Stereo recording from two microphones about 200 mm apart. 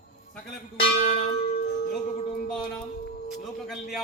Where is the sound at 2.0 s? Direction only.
35° left (ahead or behind).